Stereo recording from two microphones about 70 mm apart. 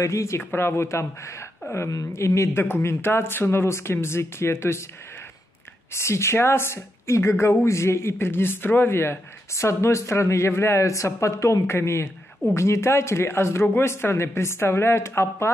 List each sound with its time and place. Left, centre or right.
0.0 s speech: left
0.4 s speech: left
5.9 s speech: left